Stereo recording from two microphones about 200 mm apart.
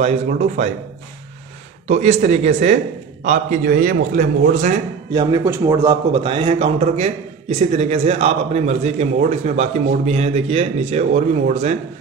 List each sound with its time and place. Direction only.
1.9 s a man's voice: 35° right (ahead or behind)
5.1 s a man's voice: 20° right (ahead or behind); by 11.7 s 35° right (ahead or behind)